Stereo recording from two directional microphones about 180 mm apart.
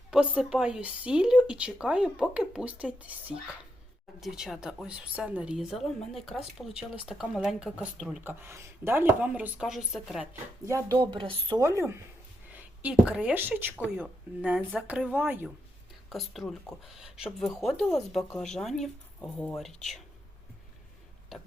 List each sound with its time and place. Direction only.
0.1 s speech: 5° right (ahead or behind)
8.2 s speech: 10° right (ahead or behind)
10.7 s speech: 20° right (ahead or behind)
16.0 s speech: centre (ahead or behind)